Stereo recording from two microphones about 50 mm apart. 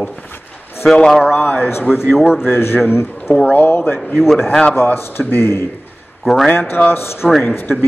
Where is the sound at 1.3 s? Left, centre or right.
Left.